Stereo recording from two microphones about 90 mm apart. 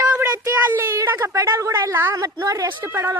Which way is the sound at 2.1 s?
40° right (ahead or behind).